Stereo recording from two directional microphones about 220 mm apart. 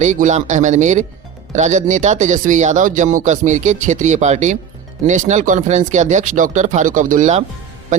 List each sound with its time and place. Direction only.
0.0 s speech: 35° right (ahead or behind)